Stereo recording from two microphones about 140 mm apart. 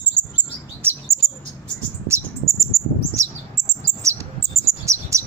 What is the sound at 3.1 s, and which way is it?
Chirp, 20° right (ahead or behind).